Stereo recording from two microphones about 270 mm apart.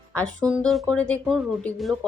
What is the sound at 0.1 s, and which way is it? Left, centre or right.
Speech, centre.